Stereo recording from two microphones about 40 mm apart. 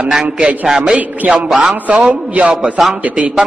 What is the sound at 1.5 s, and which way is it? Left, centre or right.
Speech, right.